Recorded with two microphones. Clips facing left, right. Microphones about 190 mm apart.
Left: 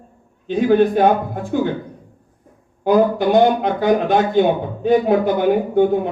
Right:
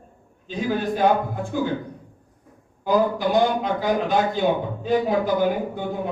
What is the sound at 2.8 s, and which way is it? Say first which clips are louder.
Speech: left 6 dB; 60° left (ahead or behind).